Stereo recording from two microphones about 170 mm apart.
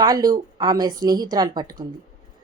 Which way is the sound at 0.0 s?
25° right (ahead or behind).